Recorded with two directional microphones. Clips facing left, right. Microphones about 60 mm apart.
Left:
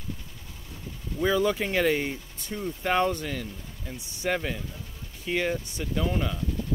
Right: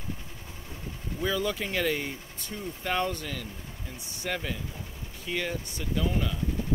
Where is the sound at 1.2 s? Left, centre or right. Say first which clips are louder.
Left 5 dB; left.